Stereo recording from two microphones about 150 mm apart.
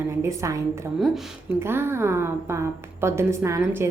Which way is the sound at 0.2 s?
20° right (ahead or behind).